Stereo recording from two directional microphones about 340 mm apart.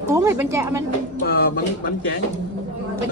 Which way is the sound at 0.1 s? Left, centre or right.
Centre.